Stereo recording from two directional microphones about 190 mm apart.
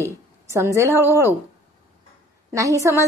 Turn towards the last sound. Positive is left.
turn(degrees=-15)  # may be behind; listen again after turning